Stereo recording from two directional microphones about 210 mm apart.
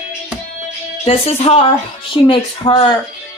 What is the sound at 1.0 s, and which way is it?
Speech, 30° left (ahead or behind).